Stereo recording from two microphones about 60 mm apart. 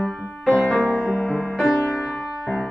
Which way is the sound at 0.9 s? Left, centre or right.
Left.